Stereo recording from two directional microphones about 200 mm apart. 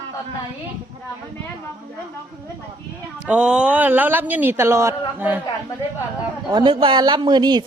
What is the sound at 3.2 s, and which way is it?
Speech, 5° right (ahead or behind).